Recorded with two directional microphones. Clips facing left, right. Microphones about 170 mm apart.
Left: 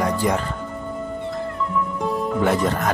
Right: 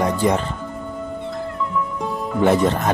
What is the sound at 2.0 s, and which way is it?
Music, centre (ahead or behind).